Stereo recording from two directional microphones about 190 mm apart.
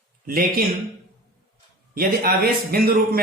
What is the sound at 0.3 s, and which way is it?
Speech, 50° right (ahead or behind).